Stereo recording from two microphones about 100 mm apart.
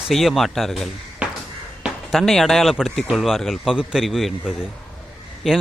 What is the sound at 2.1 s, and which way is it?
A man's voice, 5° left (ahead or behind).